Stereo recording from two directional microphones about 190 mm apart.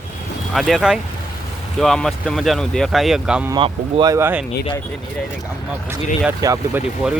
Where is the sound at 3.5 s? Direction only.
25° right (ahead or behind).